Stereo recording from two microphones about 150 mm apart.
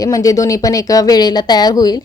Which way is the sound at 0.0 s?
25° left (ahead or behind).